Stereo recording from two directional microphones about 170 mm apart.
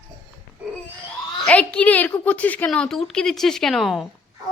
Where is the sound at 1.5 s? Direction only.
5° left (ahead or behind).